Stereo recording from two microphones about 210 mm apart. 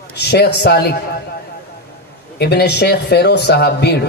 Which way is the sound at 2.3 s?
50° left (ahead or behind).